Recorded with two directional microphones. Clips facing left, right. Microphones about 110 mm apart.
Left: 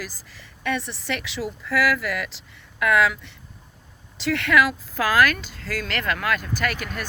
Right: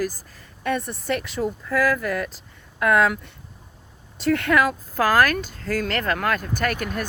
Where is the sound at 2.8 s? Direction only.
45° right (ahead or behind).